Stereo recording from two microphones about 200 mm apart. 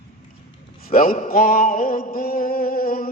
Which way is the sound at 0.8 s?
45° left (ahead or behind).